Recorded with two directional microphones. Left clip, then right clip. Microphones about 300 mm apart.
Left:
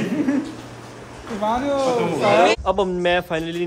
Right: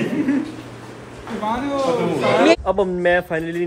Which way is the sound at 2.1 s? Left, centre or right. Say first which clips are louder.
Right 1 dB; centre.